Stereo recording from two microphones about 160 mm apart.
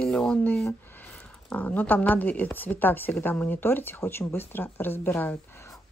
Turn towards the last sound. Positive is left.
turn(degrees=15)  # may be behind; listen again after turning